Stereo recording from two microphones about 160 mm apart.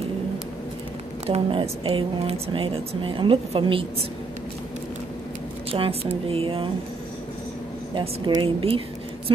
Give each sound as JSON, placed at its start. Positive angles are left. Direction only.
{"t": 1.2, "sound": "speech", "side_deg": -35}
{"t": 5.7, "sound": "a woman's voice", "side_deg": -35}
{"t": 7.9, "sound": "speech", "side_deg": -30}